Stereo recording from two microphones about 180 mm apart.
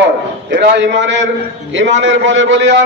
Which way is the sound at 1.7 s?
90° right.